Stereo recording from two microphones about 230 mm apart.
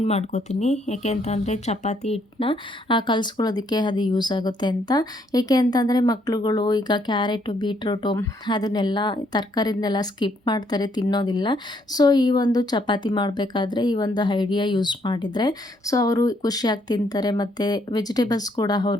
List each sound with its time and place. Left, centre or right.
0.0 s speech: left